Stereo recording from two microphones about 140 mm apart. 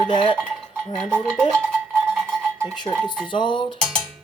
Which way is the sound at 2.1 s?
Centre (ahead or behind).